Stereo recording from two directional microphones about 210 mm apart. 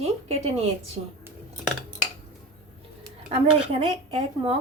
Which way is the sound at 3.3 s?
25° right (ahead or behind).